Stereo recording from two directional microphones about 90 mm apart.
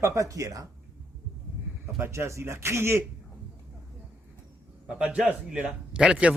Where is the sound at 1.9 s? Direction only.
30° right (ahead or behind).